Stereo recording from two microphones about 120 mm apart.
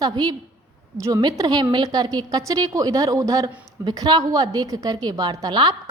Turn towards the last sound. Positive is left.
turn(degrees=-35)  # may be behind; listen again after turning